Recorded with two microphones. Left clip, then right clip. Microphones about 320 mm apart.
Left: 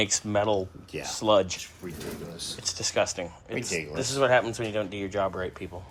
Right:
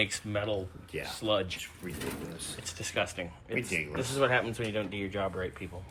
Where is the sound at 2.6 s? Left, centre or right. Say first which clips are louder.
Left 6 dB; centre.